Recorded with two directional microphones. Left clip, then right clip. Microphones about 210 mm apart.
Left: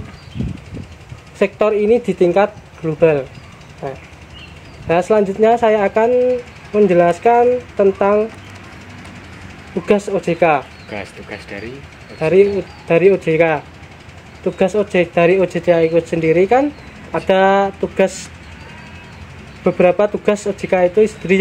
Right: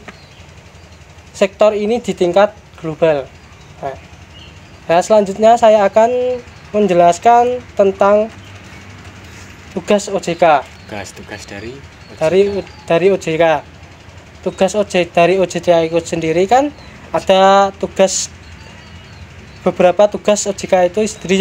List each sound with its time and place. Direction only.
1.4 s speech: 25° right (ahead or behind)
9.9 s speech: 30° right (ahead or behind)
10.9 s speech: 35° right (ahead or behind)
19.6 s speech: 25° right (ahead or behind)